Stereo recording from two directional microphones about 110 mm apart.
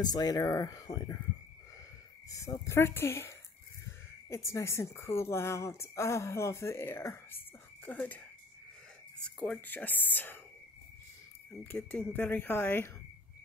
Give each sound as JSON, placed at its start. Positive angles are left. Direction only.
{"t": 0.0, "sound": "speech", "side_deg": 35}
{"t": 2.2, "sound": "a woman's voice", "side_deg": 30}
{"t": 4.5, "sound": "a woman's voice", "side_deg": 25}
{"t": 9.2, "sound": "speech", "side_deg": 10}
{"t": 11.6, "sound": "speech", "side_deg": 15}